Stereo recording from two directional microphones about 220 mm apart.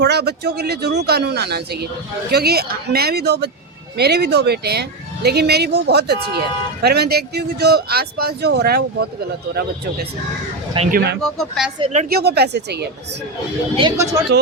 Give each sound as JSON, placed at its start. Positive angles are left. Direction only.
{"t": 0.0, "sound": "speech", "side_deg": -50}
{"t": 11.2, "sound": "speech", "side_deg": 0}
{"t": 12.0, "sound": "speech", "side_deg": -45}
{"t": 13.7, "sound": "speech", "side_deg": -15}